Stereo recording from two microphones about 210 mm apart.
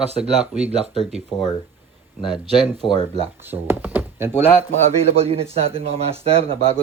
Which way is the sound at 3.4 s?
10° right (ahead or behind).